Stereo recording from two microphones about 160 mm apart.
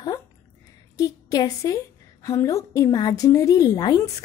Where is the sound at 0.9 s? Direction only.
25° left (ahead or behind).